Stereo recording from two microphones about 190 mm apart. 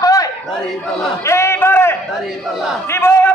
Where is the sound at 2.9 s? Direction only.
15° left (ahead or behind).